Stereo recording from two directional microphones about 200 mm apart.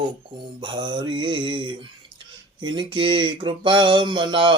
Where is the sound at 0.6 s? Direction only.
25° right (ahead or behind).